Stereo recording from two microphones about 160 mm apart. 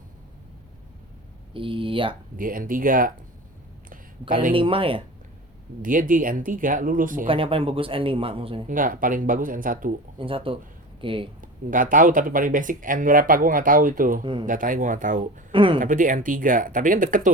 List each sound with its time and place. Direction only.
1.5 s speech: 35° right (ahead or behind)
2.3 s speech: 60° right (ahead or behind)
4.5 s speech: 35° right (ahead or behind)
5.8 s speech: 55° right (ahead or behind)
7.3 s speech: 35° right (ahead or behind)
8.7 s speech: 60° right (ahead or behind)
10.2 s speech: 35° right (ahead or behind)
11.3 s speech: 55° right (ahead or behind)
15.5 s speech: 30° right (ahead or behind)
15.8 s speech: 55° right (ahead or behind)